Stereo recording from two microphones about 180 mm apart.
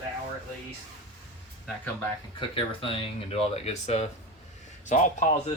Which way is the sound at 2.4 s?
30° left (ahead or behind).